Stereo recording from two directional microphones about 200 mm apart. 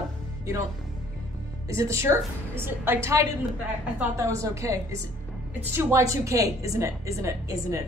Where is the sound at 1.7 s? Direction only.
15° right (ahead or behind).